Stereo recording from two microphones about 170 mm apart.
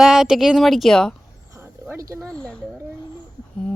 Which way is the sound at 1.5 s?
15° right (ahead or behind).